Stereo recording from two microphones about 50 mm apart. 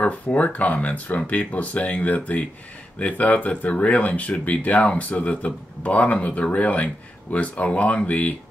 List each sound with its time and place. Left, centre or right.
0.0 s speech: left